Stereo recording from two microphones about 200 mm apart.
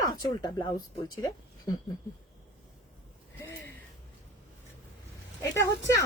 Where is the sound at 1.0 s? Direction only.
20° left (ahead or behind).